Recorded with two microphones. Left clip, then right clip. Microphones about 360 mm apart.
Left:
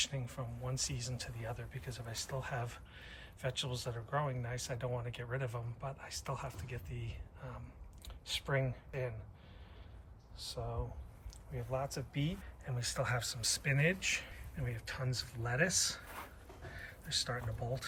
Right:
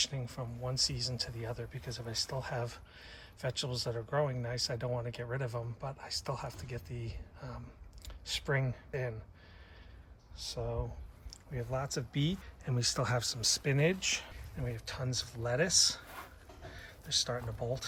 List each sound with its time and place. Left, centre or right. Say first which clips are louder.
0.0 s speech: right 3 dB; centre
10.3 s speech: right 4 dB; centre
11.8 s speech: right 3 dB; centre